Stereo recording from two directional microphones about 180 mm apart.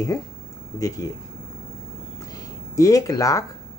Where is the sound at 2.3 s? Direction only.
20° left (ahead or behind).